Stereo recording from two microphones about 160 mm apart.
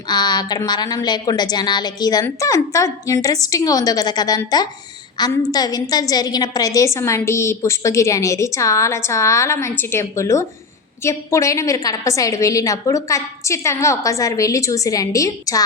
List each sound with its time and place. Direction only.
0.1 s a woman's voice: 25° left (ahead or behind)